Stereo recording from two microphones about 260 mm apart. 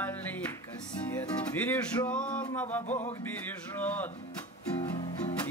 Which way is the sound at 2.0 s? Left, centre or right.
Centre.